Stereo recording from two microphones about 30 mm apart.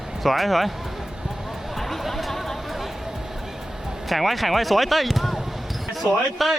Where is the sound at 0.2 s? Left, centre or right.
Centre.